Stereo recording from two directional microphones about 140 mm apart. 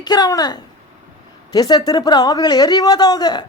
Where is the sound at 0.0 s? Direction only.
30° left (ahead or behind).